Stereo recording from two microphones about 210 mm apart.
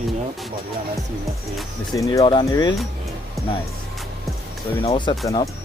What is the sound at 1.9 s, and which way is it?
Speech, 15° left (ahead or behind).